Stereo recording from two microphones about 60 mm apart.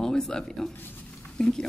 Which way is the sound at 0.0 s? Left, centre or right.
Centre.